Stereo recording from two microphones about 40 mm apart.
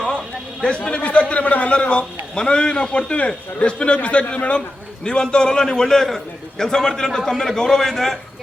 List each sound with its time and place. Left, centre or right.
0.9 s a man's voice: left
2.3 s a man's voice: left
5.0 s a man's voice: left